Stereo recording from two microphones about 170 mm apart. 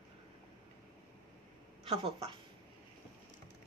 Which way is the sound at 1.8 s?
35° right (ahead or behind).